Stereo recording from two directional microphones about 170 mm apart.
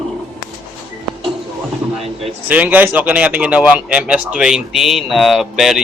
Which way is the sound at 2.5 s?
10° right (ahead or behind).